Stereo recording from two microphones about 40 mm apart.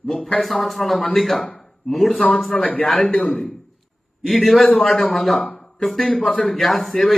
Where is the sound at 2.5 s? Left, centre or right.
Left.